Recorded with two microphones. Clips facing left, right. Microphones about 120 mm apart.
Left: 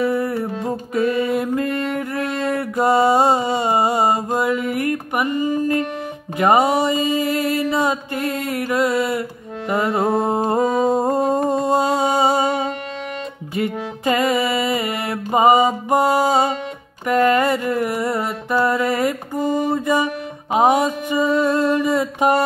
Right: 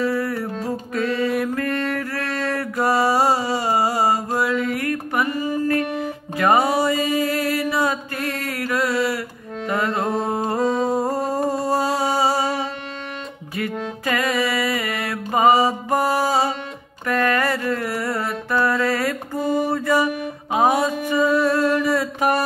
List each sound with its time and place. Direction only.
0.0 s music: 20° left (ahead or behind)
2.5 s a sound: 20° left (ahead or behind)
6.3 s music: 20° left (ahead or behind)
10.9 s humming: 25° left (ahead or behind)
11.4 s music: 20° left (ahead or behind)
20.5 s mantra: 20° left (ahead or behind)